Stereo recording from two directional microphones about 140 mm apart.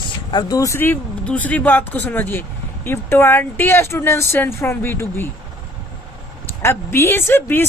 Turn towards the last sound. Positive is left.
turn(degrees=15)  # may be behind; listen again after turning